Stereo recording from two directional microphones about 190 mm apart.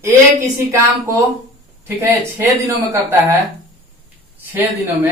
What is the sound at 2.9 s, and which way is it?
Speech, 15° right (ahead or behind).